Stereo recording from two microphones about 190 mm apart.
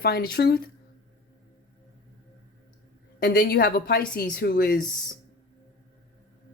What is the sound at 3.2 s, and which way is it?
Speech, 55° left (ahead or behind).